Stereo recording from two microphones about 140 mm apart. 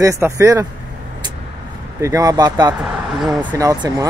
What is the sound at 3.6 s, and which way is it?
Speech, 25° right (ahead or behind).